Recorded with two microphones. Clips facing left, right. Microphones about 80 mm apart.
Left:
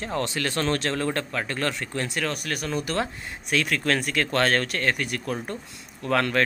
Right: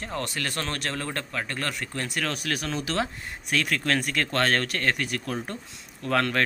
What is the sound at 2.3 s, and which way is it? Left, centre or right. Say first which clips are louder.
Speech: left 1 dB; centre.